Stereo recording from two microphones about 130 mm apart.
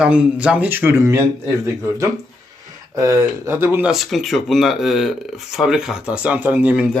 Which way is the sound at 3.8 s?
Centre (ahead or behind).